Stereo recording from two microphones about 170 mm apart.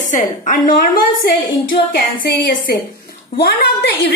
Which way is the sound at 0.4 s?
50° left (ahead or behind).